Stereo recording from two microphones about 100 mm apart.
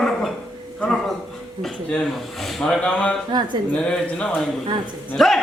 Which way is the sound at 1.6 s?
5° left (ahead or behind).